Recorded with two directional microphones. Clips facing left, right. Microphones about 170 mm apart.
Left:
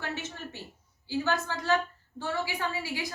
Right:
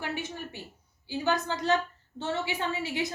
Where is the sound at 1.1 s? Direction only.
15° right (ahead or behind).